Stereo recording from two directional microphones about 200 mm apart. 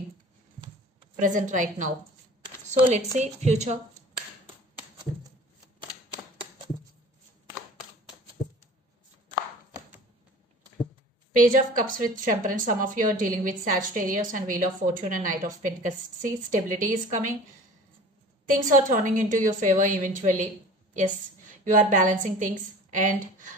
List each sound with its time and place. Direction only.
1.2 s a woman's voice: 40° right (ahead or behind)
11.3 s a woman's voice: 45° right (ahead or behind)
18.5 s a woman's voice: 40° right (ahead or behind)